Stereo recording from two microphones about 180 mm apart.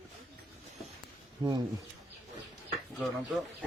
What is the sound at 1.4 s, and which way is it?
Speech, 20° right (ahead or behind).